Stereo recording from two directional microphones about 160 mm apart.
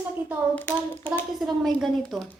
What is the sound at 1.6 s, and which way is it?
Speech, centre (ahead or behind).